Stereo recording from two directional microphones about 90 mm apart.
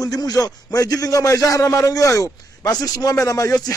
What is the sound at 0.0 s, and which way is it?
A man's voice, 45° left (ahead or behind).